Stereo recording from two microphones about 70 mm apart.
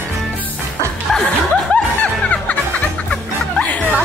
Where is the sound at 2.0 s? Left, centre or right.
Centre.